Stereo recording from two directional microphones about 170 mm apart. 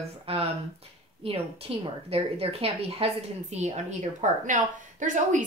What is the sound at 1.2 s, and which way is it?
A woman's voice, 35° right (ahead or behind).